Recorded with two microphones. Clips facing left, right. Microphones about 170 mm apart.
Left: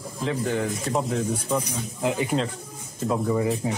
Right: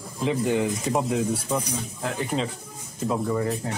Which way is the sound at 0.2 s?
15° right (ahead or behind).